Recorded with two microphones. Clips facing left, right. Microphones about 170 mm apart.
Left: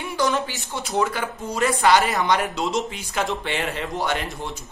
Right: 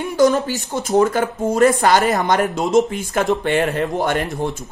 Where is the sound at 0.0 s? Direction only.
40° right (ahead or behind).